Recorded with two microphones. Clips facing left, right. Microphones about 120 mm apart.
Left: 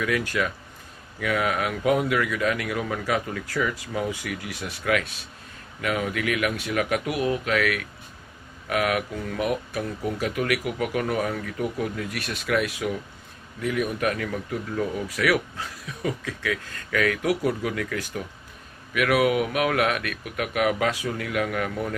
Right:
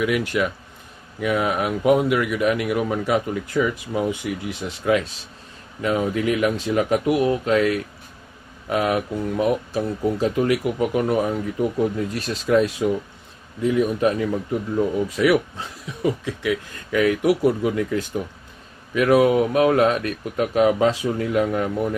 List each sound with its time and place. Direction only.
0.0 s speech: 20° right (ahead or behind)